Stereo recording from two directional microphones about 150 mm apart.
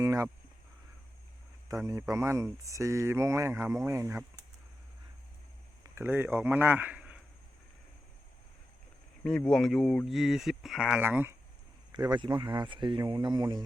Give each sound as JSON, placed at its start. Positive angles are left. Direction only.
{"t": 0.0, "sound": "a sound", "side_deg": -20}
{"t": 1.6, "sound": "speech", "side_deg": -20}
{"t": 5.8, "sound": "a man's voice", "side_deg": -15}
{"t": 9.2, "sound": "speech", "side_deg": 5}
{"t": 11.0, "sound": "speech", "side_deg": -15}
{"t": 11.9, "sound": "speech", "side_deg": -30}